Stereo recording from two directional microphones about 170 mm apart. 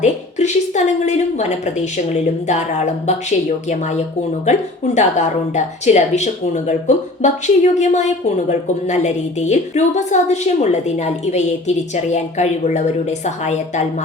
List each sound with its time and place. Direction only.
0.0 s a woman's voice: 45° left (ahead or behind)